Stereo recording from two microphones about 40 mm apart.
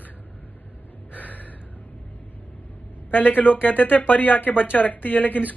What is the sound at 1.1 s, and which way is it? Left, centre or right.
Gasp, left.